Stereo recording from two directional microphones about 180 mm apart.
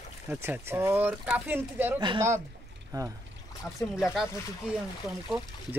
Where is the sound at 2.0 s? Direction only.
20° right (ahead or behind).